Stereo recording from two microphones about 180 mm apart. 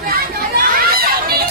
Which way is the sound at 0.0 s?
55° right (ahead or behind).